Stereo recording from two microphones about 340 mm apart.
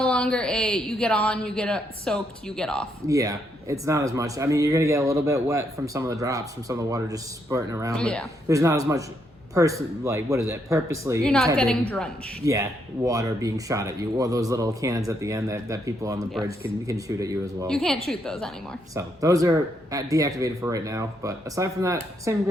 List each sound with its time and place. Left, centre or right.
0.0 s a woman's voice: centre
3.1 s speech: centre
7.9 s a woman's voice: centre
8.4 s a woman's voice: centre
12.5 s speech: centre
17.7 s a woman's voice: centre
18.9 s speech: centre